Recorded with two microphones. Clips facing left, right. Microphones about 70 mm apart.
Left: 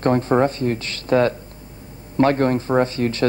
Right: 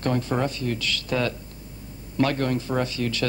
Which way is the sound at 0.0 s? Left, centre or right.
Left.